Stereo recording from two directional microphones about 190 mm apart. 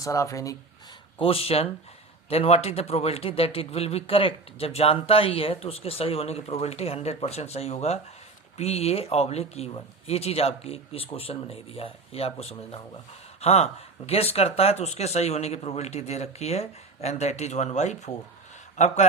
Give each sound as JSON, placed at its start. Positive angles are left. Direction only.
{"t": 0.0, "sound": "speech", "side_deg": 15}
{"t": 1.2, "sound": "a man's voice", "side_deg": 30}